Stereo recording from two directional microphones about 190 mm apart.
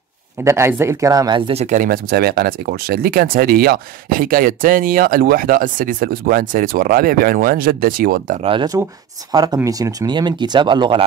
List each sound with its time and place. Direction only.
0.4 s speech: 15° right (ahead or behind)
1.5 s speech: 35° right (ahead or behind)
8.4 s speech: 25° right (ahead or behind)